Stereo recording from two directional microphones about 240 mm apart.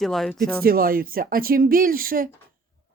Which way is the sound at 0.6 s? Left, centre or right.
Right.